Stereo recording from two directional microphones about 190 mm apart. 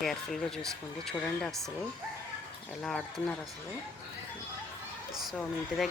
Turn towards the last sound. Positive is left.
turn(degrees=0)  # may be behind; listen again after turning